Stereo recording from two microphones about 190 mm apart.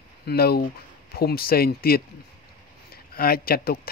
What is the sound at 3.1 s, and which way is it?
Speech, 50° left (ahead or behind).